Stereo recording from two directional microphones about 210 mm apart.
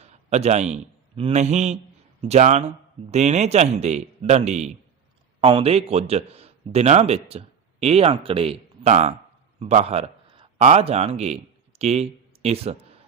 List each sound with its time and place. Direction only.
0.0 s a man's voice: 30° right (ahead or behind)